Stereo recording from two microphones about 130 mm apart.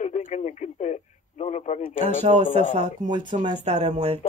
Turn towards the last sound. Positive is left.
turn(degrees=-60)  # may be behind; listen again after turning